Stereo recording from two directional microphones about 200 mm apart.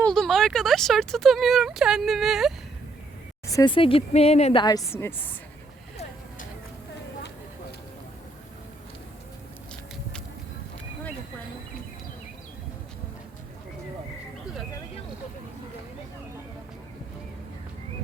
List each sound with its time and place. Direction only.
0.0 s speech: centre (ahead or behind)
3.4 s speech: 20° left (ahead or behind)
4.9 s a woman's voice: 10° left (ahead or behind)